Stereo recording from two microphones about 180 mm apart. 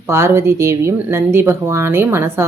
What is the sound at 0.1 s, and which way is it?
Speech, 15° right (ahead or behind).